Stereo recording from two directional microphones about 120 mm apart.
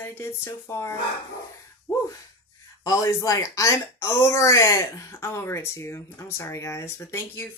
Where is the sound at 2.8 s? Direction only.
30° left (ahead or behind).